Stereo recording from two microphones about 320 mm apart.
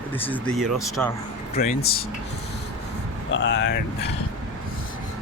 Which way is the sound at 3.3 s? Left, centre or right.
Left.